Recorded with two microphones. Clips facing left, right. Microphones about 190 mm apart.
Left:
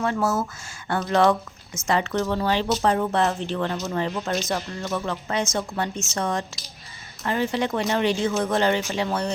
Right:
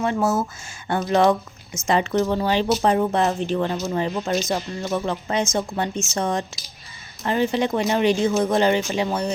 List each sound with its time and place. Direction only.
0.0 s speech: 20° right (ahead or behind)